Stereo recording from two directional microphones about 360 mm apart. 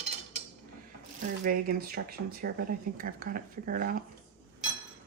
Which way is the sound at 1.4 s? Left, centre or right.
Right.